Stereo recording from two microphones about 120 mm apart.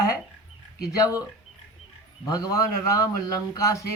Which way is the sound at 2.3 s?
30° left (ahead or behind).